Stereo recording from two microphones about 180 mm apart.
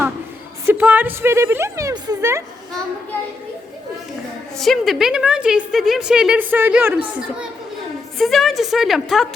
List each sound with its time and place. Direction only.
0.6 s a woman's voice: 10° right (ahead or behind)
4.5 s a woman's voice: centre (ahead or behind)